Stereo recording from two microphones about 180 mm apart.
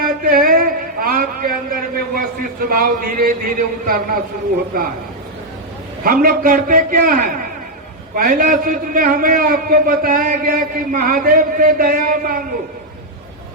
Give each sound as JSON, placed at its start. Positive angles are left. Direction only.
{"t": 0.0, "sound": "a sound", "side_deg": -55}
{"t": 2.6, "sound": "a man's voice", "side_deg": -50}
{"t": 6.0, "sound": "a man's voice", "side_deg": -50}